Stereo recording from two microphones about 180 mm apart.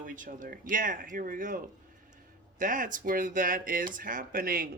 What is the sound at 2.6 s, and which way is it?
Speech, 50° right (ahead or behind).